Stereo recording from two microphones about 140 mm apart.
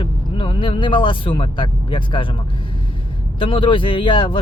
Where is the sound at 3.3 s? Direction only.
35° left (ahead or behind).